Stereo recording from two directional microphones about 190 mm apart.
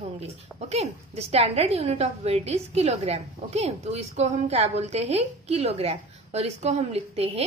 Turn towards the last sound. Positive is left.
turn(degrees=-30)  # may be behind; listen again after turning